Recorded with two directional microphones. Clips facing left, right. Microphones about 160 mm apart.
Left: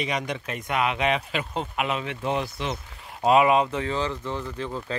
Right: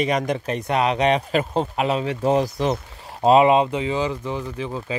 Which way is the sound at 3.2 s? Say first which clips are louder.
Right 4 dB; 25° right (ahead or behind).